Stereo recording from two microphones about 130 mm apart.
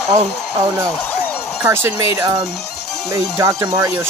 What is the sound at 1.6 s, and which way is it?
Speech, 15° right (ahead or behind).